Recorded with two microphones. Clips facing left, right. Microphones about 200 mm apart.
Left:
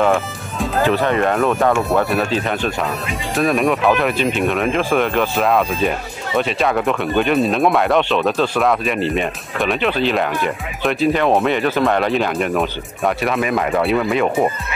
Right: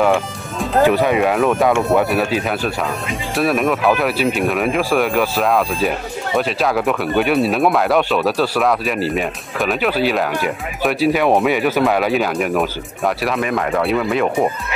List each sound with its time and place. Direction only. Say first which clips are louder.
0.0 s music: right 1 dB; centre (ahead or behind)
0.8 s speech: right 1 dB; 10° right (ahead or behind)